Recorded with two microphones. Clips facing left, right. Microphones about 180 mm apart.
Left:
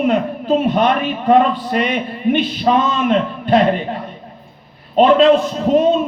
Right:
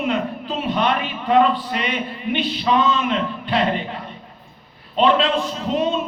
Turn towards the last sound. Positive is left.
turn(degrees=45)  # may be behind; listen again after turning